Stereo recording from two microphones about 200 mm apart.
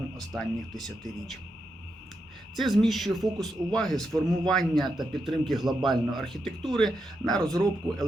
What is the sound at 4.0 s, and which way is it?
Speech, 20° right (ahead or behind).